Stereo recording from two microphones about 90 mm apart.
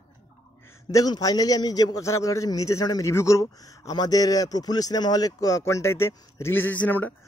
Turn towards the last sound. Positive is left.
turn(degrees=20)  # may be behind; listen again after turning